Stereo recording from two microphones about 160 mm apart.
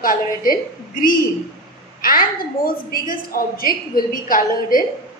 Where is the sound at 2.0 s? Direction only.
65° left (ahead or behind).